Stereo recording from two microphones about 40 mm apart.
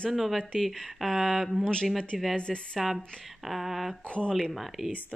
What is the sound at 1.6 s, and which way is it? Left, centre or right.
Speech, left.